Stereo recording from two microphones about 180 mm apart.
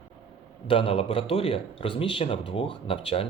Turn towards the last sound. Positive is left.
turn(degrees=30)  # may be behind; listen again after turning